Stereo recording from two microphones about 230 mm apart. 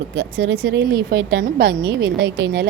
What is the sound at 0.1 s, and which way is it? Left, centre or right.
A woman's voice, right.